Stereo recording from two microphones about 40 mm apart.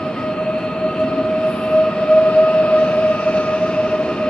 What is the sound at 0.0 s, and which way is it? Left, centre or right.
Train, centre.